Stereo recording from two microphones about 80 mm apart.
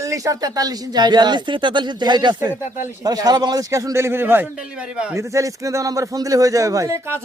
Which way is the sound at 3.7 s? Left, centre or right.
Right.